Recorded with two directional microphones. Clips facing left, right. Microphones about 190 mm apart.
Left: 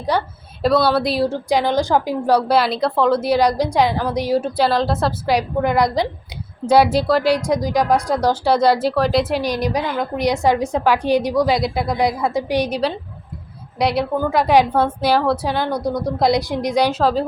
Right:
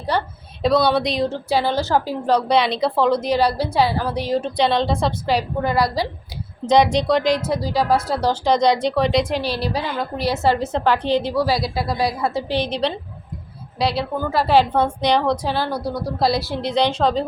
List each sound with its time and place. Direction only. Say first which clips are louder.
0.6 s a woman's voice: left 1 dB; centre (ahead or behind); by 6.1 s 20° left (ahead or behind)
6.7 s a woman's voice: left 1 dB; 5° left (ahead or behind)
9.4 s a woman's voice: left 3 dB; 15° left (ahead or behind)
15.5 s a woman's voice: left 3 dB; 20° left (ahead or behind)